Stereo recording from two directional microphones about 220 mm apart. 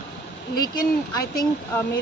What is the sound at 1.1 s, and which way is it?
Speech, 15° left (ahead or behind).